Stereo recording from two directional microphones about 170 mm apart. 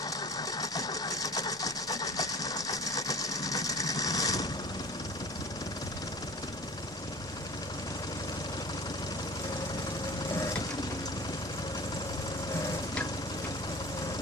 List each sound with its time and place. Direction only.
0.6 s engine: 20° left (ahead or behind)